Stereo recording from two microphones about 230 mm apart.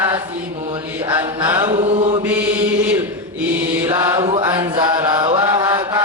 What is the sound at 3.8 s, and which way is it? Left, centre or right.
Mantra, centre.